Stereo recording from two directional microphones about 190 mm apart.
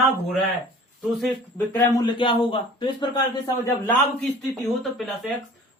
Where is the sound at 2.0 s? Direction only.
25° left (ahead or behind).